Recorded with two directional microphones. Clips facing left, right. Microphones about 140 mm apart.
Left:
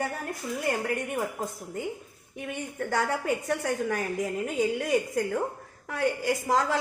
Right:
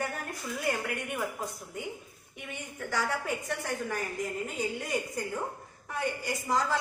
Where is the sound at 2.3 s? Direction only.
50° left (ahead or behind).